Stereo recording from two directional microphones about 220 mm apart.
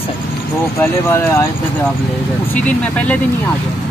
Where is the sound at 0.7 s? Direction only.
10° left (ahead or behind).